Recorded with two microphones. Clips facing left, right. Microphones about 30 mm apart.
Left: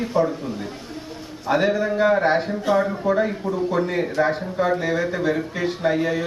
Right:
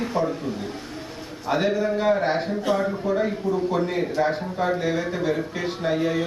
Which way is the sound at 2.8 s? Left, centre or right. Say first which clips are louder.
Left 3 dB; centre.